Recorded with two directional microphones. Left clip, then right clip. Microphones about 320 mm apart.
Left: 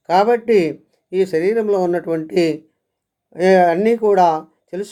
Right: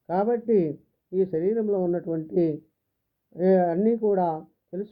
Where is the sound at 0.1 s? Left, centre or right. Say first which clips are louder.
Left 10 dB; centre.